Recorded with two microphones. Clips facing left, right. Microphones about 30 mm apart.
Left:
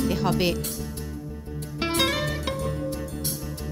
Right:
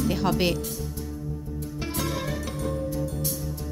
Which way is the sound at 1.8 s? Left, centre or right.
Left.